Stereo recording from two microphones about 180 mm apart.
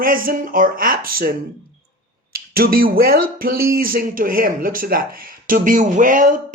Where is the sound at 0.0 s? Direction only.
50° right (ahead or behind).